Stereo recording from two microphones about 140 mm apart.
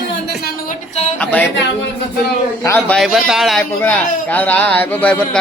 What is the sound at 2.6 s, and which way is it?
Speech, 15° left (ahead or behind).